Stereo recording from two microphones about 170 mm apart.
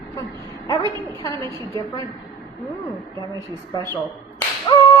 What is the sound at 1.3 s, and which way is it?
Speech, 25° right (ahead or behind).